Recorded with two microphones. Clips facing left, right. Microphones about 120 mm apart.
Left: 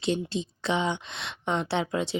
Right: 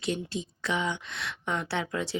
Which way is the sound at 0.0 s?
25° left (ahead or behind).